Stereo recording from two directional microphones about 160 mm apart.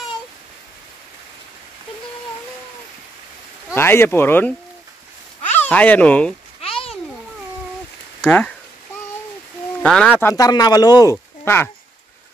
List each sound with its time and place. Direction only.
3.7 s speech: 15° left (ahead or behind)
6.6 s a sound: 35° left (ahead or behind)
8.3 s speech: 10° left (ahead or behind)
9.8 s speech: 5° left (ahead or behind)
10.2 s speech: 20° left (ahead or behind)